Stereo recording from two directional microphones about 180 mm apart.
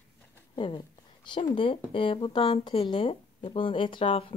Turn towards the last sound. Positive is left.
turn(degrees=30)  # may be behind; listen again after turning